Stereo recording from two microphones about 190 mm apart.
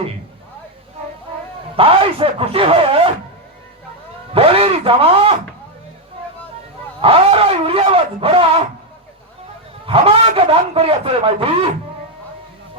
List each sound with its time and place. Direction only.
1.7 s speech: 30° right (ahead or behind)
4.4 s speech: 30° right (ahead or behind)
7.0 s a man's voice: 30° right (ahead or behind)
9.8 s a man's voice: 30° right (ahead or behind)